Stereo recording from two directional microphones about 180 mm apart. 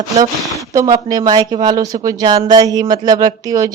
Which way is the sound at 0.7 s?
20° right (ahead or behind).